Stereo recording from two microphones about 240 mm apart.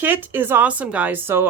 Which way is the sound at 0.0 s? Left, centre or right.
Centre.